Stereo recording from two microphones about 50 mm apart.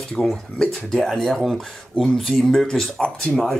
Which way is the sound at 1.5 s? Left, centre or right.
Centre.